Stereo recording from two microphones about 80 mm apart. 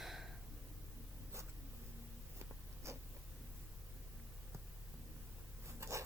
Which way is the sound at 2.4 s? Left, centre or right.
Right.